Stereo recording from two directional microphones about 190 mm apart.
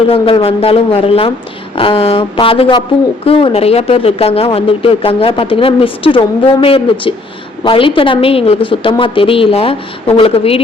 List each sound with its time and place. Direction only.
0.1 s speech: 30° left (ahead or behind)